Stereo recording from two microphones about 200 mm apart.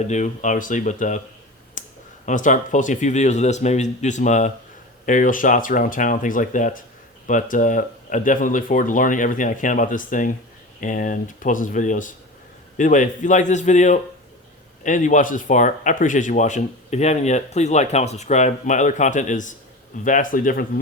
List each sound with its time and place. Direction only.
0.0 s speech: 35° left (ahead or behind)
1.8 s clicking: 40° left (ahead or behind)
2.2 s speech: 40° left (ahead or behind)